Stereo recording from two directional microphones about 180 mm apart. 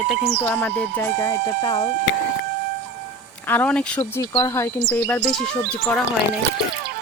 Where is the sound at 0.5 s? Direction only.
10° left (ahead or behind).